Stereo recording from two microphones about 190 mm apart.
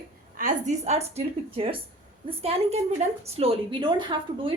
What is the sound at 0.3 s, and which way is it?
A woman's voice, 40° right (ahead or behind).